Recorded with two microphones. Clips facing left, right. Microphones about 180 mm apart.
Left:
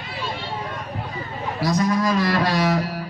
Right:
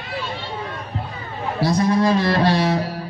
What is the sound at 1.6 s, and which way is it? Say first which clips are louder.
Speech: right 3 dB; 30° right (ahead or behind).